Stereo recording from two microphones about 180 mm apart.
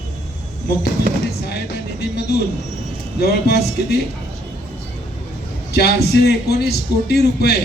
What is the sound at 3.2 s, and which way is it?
Speech, 60° left (ahead or behind).